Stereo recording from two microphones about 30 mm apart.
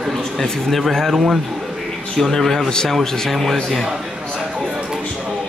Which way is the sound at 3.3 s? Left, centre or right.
Centre.